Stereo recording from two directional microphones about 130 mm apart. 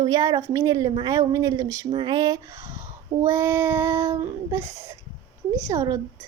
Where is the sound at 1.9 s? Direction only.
35° right (ahead or behind).